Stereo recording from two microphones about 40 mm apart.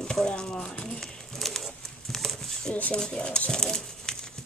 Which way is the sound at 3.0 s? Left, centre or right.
Left.